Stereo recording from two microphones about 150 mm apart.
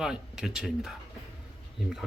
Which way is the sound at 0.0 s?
5° right (ahead or behind).